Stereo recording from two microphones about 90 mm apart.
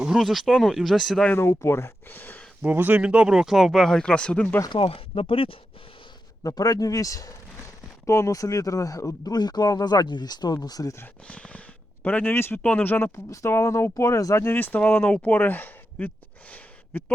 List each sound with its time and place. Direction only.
0.0 s speech: 5° right (ahead or behind)
1.4 s speech: 30° left (ahead or behind)
2.6 s speech: 20° right (ahead or behind); by 4.5 s 15° left (ahead or behind)
4.7 s speech: 80° left
6.4 s speech: 40° left (ahead or behind)
11.3 s speech: 15° left (ahead or behind)